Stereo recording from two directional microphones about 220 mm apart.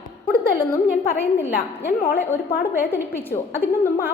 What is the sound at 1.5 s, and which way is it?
A woman's voice, 40° left (ahead or behind).